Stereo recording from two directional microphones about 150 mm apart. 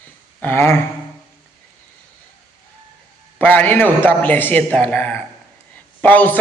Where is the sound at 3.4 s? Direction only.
10° left (ahead or behind).